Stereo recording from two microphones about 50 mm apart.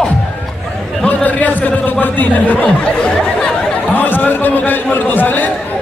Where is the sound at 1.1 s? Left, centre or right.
Left.